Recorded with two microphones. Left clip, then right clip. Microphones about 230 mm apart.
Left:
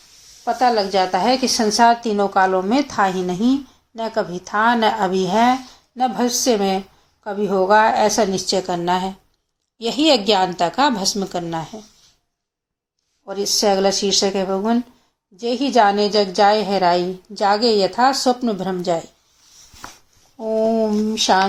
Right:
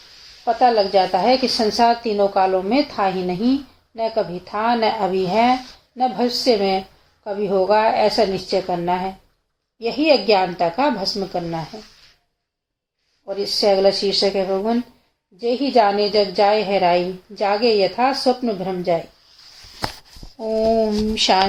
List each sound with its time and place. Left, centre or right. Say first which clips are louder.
0.4 s a woman's voice: right 1 dB; left
4.8 s a woman's voice: left 1 dB; left
6.0 s a woman's voice: even; left
13.2 s a woman's voice: even; left
20.4 s a woman's voice: even; centre